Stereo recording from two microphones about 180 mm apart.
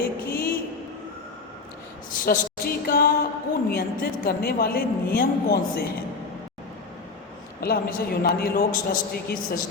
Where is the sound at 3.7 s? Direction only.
55° left (ahead or behind).